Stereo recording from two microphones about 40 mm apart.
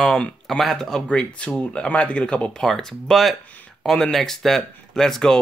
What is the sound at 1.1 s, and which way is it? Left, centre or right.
Speech, left.